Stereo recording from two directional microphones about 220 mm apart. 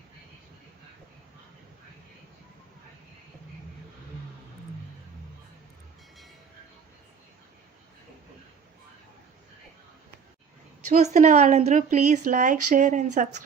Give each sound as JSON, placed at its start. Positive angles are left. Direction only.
{"t": 10.8, "sound": "speech", "side_deg": -30}